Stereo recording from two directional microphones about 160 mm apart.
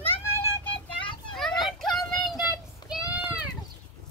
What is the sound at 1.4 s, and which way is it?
Children playing, centre (ahead or behind).